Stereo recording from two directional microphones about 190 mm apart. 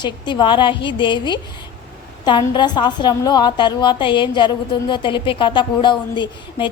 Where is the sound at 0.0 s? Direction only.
25° left (ahead or behind).